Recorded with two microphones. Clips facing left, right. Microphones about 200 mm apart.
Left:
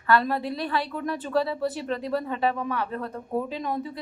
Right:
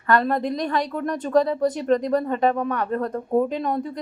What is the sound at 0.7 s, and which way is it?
Speech, 45° right (ahead or behind).